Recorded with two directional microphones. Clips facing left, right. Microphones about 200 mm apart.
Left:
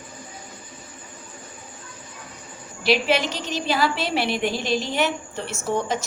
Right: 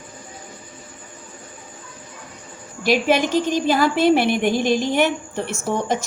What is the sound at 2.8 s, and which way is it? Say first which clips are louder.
A woman's voice: right 3 dB; 45° right (ahead or behind).